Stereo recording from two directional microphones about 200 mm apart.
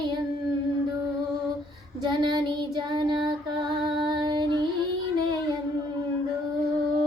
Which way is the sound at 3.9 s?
20° right (ahead or behind).